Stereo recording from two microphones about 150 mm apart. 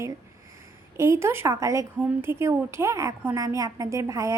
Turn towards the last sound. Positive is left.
turn(degrees=-20)  # may be behind; listen again after turning